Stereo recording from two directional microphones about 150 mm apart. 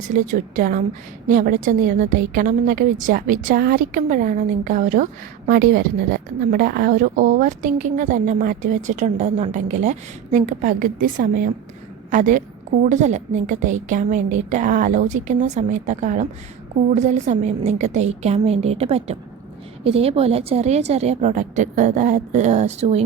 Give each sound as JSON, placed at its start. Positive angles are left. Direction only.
{"t": 0.1, "sound": "a woman's voice", "side_deg": -55}
{"t": 5.5, "sound": "a woman's voice", "side_deg": -75}